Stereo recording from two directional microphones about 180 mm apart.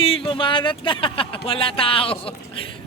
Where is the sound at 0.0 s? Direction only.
30° left (ahead or behind).